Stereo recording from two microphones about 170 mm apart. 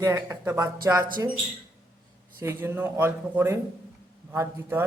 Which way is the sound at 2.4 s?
15° right (ahead or behind).